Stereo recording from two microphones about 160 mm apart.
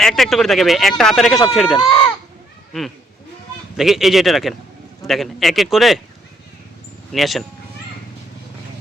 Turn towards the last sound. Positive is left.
turn(degrees=0)  # may be behind; listen again after turning